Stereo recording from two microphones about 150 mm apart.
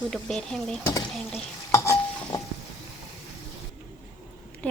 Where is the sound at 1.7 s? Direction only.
20° left (ahead or behind).